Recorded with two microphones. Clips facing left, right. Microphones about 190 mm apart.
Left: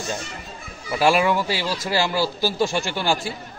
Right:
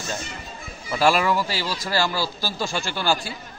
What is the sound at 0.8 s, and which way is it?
A man's voice, 15° left (ahead or behind).